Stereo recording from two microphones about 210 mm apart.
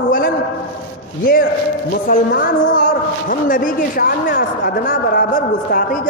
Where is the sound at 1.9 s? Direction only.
45° left (ahead or behind).